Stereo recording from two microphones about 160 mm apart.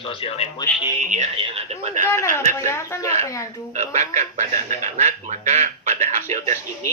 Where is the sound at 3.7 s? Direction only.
50° right (ahead or behind).